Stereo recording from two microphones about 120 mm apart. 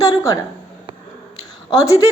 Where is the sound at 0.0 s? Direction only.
30° left (ahead or behind).